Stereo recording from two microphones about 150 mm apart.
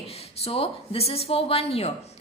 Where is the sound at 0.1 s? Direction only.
40° left (ahead or behind).